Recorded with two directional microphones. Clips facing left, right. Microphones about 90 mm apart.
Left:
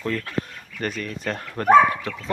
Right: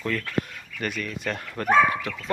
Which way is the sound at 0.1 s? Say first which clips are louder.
Even; 30° left (ahead or behind).